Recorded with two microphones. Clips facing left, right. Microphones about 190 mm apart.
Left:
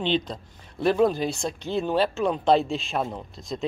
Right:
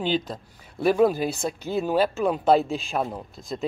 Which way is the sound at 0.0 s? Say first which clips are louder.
Even; 5° right (ahead or behind).